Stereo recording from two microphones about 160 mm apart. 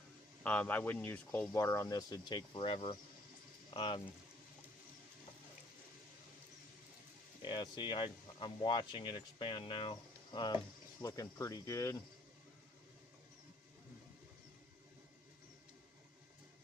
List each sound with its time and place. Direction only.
0.4 s speech: 10° left (ahead or behind); by 4.0 s 30° left (ahead or behind)
7.4 s speech: 30° left (ahead or behind)